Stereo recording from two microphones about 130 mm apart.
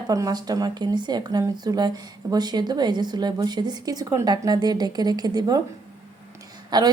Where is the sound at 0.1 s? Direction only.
30° right (ahead or behind).